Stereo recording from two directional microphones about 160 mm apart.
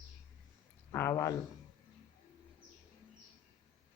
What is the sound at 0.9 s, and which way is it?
Speech, 15° left (ahead or behind).